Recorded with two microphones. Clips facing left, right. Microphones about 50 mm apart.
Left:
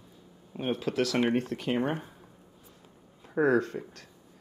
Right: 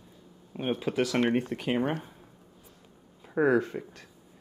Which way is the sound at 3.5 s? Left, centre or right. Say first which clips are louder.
Even; right.